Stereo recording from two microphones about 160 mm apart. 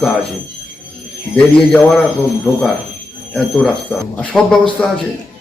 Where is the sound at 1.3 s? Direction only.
5° left (ahead or behind).